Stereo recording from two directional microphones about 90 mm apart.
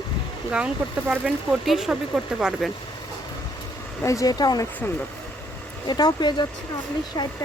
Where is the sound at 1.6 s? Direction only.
5° right (ahead or behind).